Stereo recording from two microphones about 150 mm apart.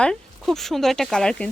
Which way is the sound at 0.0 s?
5° left (ahead or behind).